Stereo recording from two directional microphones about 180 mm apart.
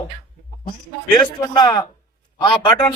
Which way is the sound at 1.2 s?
25° left (ahead or behind).